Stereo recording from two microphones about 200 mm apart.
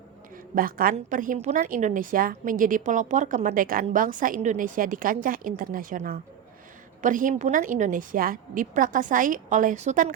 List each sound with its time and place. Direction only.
0.5 s a woman's voice: 45° right (ahead or behind)